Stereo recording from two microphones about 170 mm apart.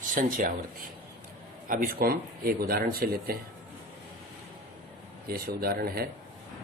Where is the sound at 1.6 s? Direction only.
55° right (ahead or behind).